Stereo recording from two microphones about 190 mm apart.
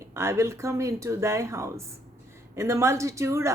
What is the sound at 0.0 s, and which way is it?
Speech, 15° right (ahead or behind).